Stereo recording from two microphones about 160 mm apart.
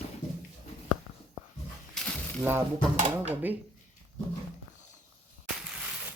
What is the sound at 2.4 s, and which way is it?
Dishes, 15° right (ahead or behind).